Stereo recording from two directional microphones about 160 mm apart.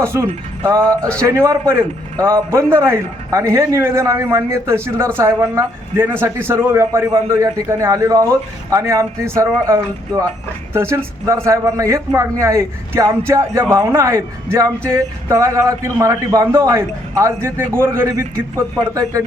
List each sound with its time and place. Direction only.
0.0 s speech: 15° right (ahead or behind)
0.8 s speech: 5° left (ahead or behind)
1.2 s a man's voice: 20° right (ahead or behind)